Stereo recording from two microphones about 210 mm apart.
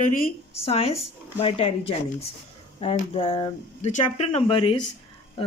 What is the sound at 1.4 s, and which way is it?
Speech, 25° left (ahead or behind).